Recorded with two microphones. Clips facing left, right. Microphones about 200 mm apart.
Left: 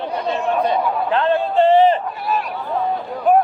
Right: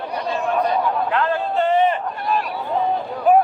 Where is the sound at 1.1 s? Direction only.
30° left (ahead or behind).